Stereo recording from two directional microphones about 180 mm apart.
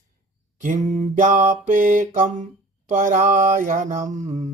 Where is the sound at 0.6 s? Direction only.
45° right (ahead or behind).